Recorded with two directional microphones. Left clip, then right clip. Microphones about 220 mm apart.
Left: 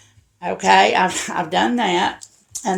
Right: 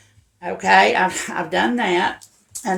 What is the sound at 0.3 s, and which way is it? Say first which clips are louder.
Speech: left 1 dB; 40° left (ahead or behind).